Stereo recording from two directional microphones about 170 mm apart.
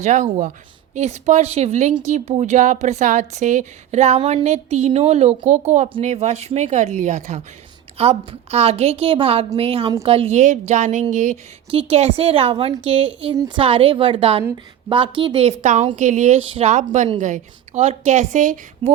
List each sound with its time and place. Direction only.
0.0 s a woman's voice: 45° right (ahead or behind)
11.7 s a woman's voice: 35° right (ahead or behind)
13.3 s a woman's voice: 20° right (ahead or behind)
13.6 s a woman's voice: 35° right (ahead or behind); by 18.9 s 50° right (ahead or behind)